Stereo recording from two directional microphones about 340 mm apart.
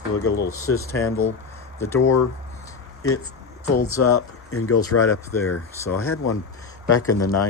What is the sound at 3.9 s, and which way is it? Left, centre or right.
Speech, left.